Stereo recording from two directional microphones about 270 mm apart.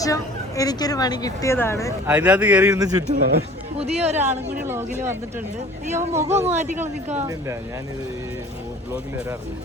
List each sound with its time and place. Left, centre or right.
0.0 s speech: centre
2.0 s speech: centre
3.2 s speech: right
3.8 s speech: right
4.6 s speech: centre
6.3 s speech: centre